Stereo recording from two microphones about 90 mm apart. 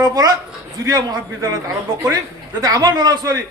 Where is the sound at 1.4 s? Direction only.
35° right (ahead or behind).